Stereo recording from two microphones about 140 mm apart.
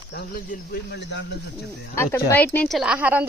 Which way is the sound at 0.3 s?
90° left.